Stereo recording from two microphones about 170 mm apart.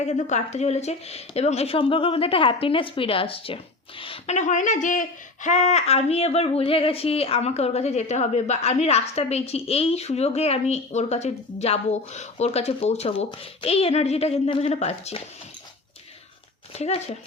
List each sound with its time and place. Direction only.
0.0 s speech: 40° left (ahead or behind)
16.7 s speech: 35° left (ahead or behind)